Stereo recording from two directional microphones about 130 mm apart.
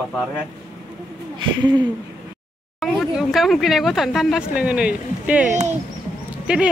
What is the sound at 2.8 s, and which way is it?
Speech, centre (ahead or behind).